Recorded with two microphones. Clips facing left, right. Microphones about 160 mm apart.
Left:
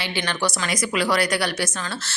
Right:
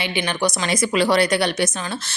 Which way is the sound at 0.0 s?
15° right (ahead or behind).